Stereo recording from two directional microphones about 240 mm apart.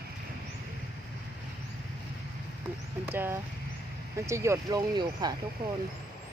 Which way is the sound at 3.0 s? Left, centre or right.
Centre.